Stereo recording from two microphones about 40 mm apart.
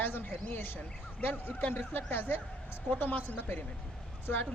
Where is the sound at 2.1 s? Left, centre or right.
Left.